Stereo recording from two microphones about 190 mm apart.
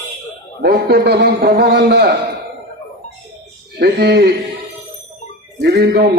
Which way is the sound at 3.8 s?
60° right (ahead or behind).